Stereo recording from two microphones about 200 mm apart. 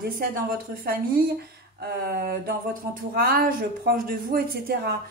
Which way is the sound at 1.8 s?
50° right (ahead or behind).